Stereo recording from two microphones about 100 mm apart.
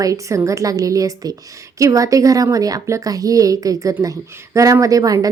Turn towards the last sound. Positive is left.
turn(degrees=-35)  # may be behind; listen again after turning